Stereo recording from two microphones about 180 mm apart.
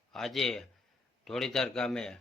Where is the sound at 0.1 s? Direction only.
Centre (ahead or behind).